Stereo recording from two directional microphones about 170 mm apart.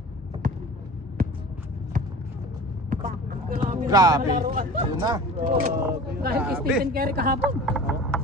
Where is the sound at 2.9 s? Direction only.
55° right (ahead or behind).